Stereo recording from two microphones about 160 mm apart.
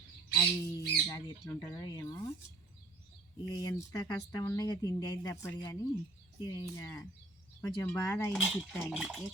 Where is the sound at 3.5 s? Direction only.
25° left (ahead or behind).